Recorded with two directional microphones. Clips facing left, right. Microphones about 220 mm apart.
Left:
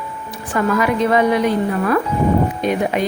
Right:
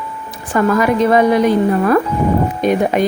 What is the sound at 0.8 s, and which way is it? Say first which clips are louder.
Speech: right 3 dB; 40° right (ahead or behind).